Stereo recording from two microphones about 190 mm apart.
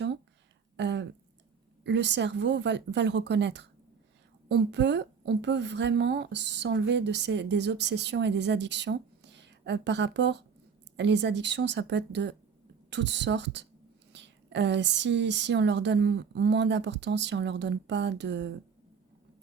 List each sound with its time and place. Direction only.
0.8 s a woman's voice: 65° right (ahead or behind)